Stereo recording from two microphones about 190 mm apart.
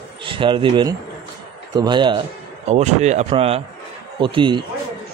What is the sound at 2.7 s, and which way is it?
Speech, 35° right (ahead or behind).